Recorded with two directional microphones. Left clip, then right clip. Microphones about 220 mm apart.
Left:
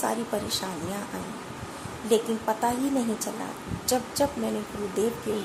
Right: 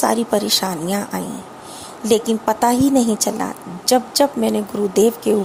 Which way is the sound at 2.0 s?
40° right (ahead or behind).